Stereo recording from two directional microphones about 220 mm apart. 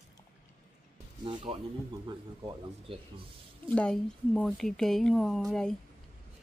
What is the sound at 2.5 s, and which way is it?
Speech, 25° right (ahead or behind).